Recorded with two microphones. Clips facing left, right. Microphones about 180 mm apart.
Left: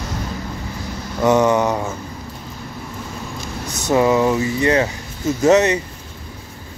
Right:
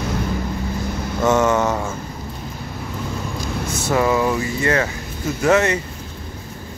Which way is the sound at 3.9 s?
20° left (ahead or behind).